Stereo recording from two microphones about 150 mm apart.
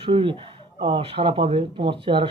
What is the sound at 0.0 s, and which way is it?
Speech, 35° right (ahead or behind).